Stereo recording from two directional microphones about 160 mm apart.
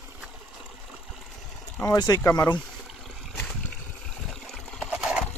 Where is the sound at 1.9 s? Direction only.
25° left (ahead or behind).